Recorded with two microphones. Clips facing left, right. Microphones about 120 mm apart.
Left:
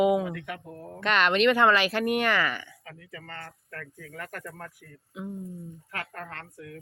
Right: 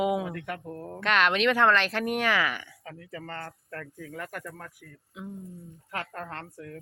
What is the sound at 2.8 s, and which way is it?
Speech, 35° right (ahead or behind).